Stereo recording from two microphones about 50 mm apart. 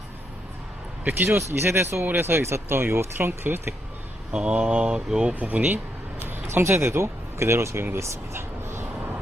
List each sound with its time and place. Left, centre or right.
1.3 s speech: right
4.3 s speech: right
5.3 s speech: right
6.2 s speech: right